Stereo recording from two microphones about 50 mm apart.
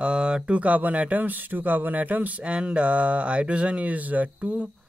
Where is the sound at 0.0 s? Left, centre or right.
Centre.